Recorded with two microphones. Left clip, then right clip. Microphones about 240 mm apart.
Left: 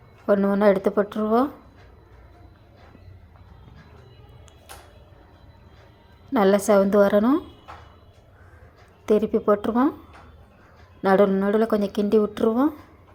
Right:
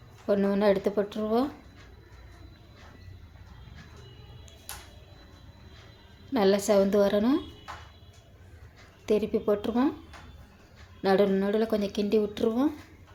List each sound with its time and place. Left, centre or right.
0.3 s speech: centre
6.3 s speech: centre
9.0 s speech: centre
11.0 s speech: centre